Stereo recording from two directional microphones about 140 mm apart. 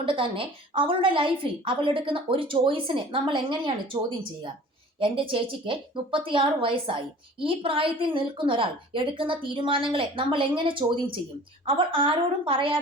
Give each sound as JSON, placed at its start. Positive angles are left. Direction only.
{"t": 0.0, "sound": "a woman's voice", "side_deg": -40}